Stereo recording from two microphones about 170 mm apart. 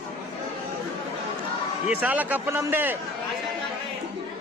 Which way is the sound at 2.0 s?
10° right (ahead or behind).